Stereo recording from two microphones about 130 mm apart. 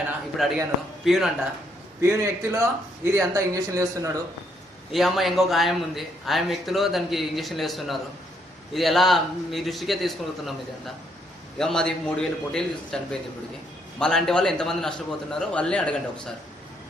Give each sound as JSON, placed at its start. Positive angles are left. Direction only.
{"t": 0.4, "sound": "a man's voice", "side_deg": 0}
{"t": 2.0, "sound": "speech", "side_deg": -20}
{"t": 4.9, "sound": "a man's voice", "side_deg": 0}